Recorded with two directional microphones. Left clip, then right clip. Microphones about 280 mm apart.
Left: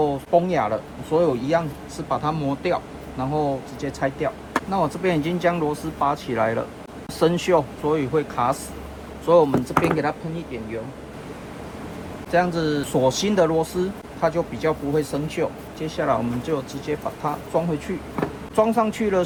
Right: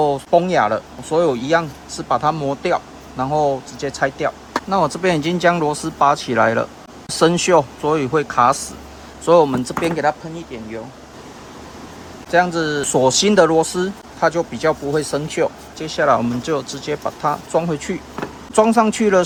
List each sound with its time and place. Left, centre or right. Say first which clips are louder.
0.0 s speech: right 4 dB; right
12.3 s speech: right 5 dB; right